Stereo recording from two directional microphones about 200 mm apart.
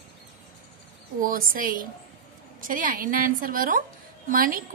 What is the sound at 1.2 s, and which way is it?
A woman's voice, 45° right (ahead or behind).